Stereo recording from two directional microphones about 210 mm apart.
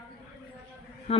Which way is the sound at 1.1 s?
30° left (ahead or behind).